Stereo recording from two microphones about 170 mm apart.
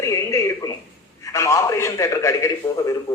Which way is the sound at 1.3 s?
20° left (ahead or behind).